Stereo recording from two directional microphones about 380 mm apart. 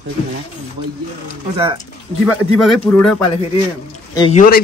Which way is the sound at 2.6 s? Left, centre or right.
Centre.